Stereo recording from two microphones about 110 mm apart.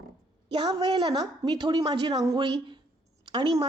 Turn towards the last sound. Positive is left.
turn(degrees=-45)  # may be behind; listen again after turning